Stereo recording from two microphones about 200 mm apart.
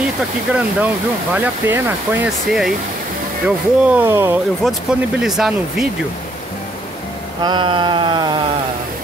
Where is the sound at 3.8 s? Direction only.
10° right (ahead or behind).